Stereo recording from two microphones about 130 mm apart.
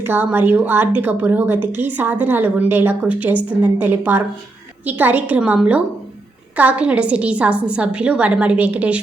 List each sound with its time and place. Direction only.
0.0 s a woman's voice: 15° right (ahead or behind)